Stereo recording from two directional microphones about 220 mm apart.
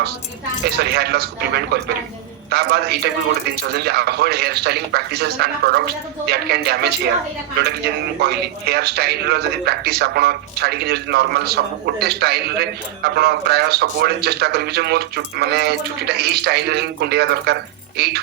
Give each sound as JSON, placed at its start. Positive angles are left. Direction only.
{"t": 0.6, "sound": "a man's voice", "side_deg": -45}